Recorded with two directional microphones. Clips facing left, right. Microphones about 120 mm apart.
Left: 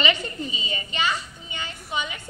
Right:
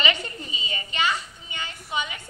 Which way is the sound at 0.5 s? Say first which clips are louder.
Left 2 dB; 25° left (ahead or behind).